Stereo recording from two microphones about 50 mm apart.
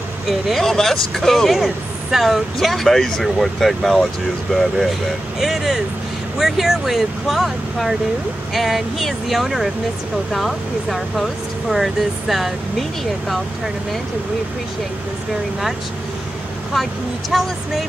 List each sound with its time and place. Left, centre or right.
0.3 s speech: centre
5.4 s speech: centre
17.3 s speech: centre